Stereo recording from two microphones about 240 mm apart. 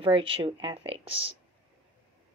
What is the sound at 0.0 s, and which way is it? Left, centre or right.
Speech, right.